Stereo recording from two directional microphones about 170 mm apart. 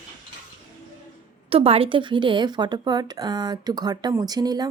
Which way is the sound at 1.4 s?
35° right (ahead or behind).